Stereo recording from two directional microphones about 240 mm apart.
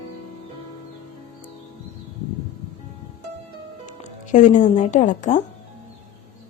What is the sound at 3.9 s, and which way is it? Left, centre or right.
Speech, left.